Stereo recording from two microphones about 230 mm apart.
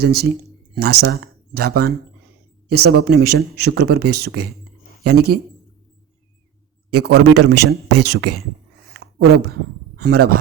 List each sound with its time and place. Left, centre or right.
0.0 s speech: right
4.1 s speech: right
5.0 s speech: right
6.9 s a man's voice: right
9.0 s a sound: right
10.0 s speech: right